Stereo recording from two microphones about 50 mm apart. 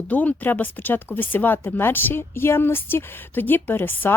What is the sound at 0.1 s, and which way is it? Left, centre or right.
Speech, left.